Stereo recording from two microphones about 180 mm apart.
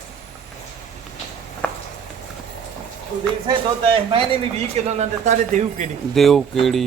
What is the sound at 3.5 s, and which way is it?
Speech, 30° right (ahead or behind).